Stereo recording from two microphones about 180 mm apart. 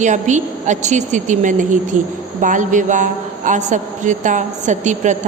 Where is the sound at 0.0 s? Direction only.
40° right (ahead or behind).